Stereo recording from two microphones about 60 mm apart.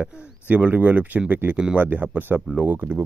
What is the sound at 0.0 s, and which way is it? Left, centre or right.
Speech, right.